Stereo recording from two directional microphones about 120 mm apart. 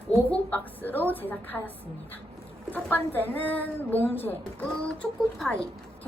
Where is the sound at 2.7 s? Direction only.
15° left (ahead or behind).